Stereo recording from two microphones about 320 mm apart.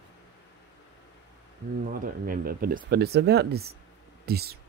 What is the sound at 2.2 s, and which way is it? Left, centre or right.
Speech, right.